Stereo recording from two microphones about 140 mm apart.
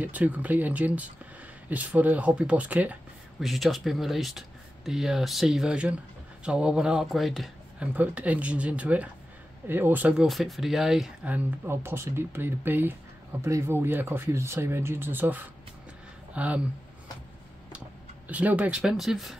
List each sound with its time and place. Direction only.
0.0 s speech: 10° right (ahead or behind)
3.4 s speech: centre (ahead or behind)
10.2 s speech: centre (ahead or behind)
18.3 s speech: 10° right (ahead or behind)